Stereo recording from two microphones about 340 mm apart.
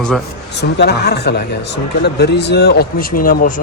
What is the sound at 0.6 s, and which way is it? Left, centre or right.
Speech, left.